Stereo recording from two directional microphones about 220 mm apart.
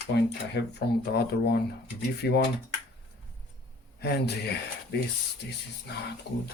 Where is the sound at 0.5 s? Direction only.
50° left (ahead or behind).